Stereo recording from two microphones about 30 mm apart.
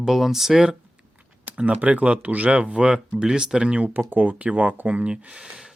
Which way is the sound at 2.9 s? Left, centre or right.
Right.